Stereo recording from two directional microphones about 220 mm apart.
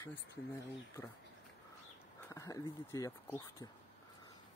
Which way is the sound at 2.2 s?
15° left (ahead or behind).